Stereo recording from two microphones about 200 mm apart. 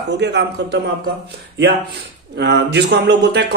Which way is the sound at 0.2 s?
60° right (ahead or behind).